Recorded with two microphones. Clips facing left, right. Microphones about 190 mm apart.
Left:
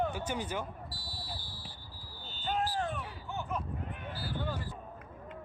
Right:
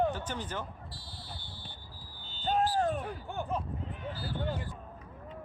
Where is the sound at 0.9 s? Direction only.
25° right (ahead or behind).